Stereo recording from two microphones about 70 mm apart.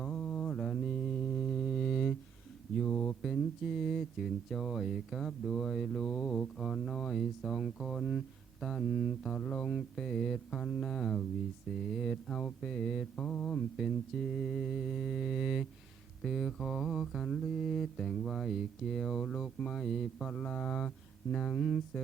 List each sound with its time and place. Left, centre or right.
0.0 s mantra: centre
3.2 s speech: centre
8.6 s mantra: centre
13.7 s speech: centre
21.3 s mantra: centre